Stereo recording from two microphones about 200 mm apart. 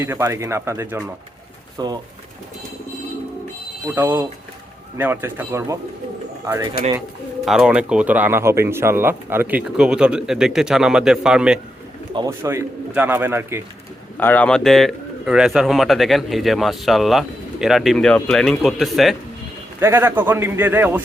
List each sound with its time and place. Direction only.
0.0 s a man's voice: 15° right (ahead or behind)
3.9 s a man's voice: 15° right (ahead or behind)
7.4 s speech: 5° right (ahead or behind)
12.1 s a man's voice: 15° right (ahead or behind)
14.2 s speech: 10° left (ahead or behind)
19.8 s a man's voice: 10° right (ahead or behind)